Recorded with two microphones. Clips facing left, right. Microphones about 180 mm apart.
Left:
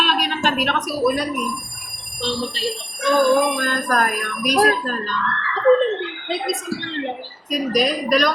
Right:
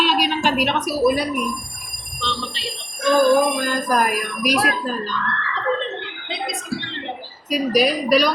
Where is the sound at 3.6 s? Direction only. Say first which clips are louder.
Right 1 dB; 10° right (ahead or behind).